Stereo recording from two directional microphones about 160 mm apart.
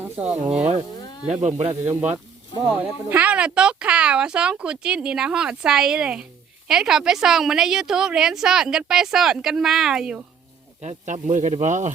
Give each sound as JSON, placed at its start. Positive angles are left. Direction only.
{"t": 0.5, "sound": "speech", "side_deg": -45}
{"t": 2.6, "sound": "a woman's voice", "side_deg": -10}
{"t": 10.8, "sound": "speech", "side_deg": -45}